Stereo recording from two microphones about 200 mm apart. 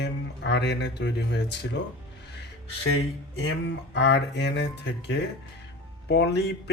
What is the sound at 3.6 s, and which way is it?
Speech, 60° left (ahead or behind).